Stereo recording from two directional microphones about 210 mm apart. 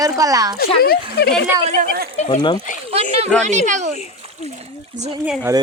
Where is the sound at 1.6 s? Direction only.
45° right (ahead or behind).